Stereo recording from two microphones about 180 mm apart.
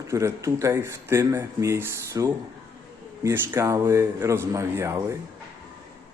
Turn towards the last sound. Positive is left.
turn(degrees=-15)  # may be behind; listen again after turning